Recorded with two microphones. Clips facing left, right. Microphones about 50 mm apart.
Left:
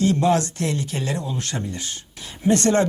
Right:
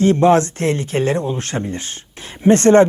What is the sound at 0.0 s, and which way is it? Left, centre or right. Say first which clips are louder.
Speech: right 6 dB; right.